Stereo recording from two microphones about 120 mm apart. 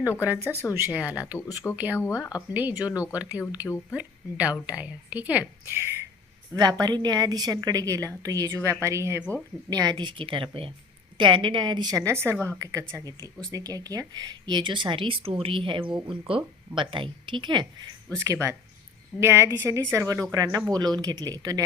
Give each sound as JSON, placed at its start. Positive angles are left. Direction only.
{"t": 0.2, "sound": "a woman's voice", "side_deg": -15}
{"t": 2.0, "sound": "speech", "side_deg": 25}
{"t": 2.5, "sound": "a woman's voice", "side_deg": -15}
{"t": 18.3, "sound": "speech", "side_deg": -25}